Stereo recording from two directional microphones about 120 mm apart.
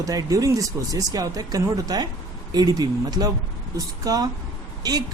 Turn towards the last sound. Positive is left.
turn(degrees=-35)  # may be behind; listen again after turning